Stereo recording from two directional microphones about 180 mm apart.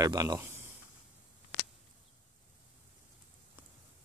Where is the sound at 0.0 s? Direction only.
20° right (ahead or behind).